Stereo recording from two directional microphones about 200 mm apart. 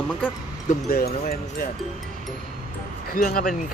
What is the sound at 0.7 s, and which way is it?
Speech, 50° left (ahead or behind).